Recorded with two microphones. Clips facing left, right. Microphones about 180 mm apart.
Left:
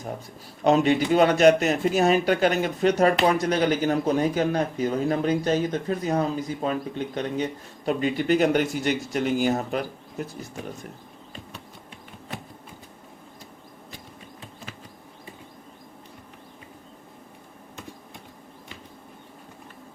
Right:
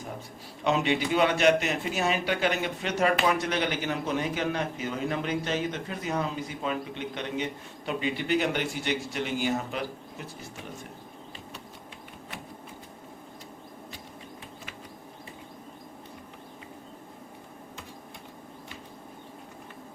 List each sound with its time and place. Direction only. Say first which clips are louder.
0.6 s a man's voice: left 6 dB; 40° left (ahead or behind)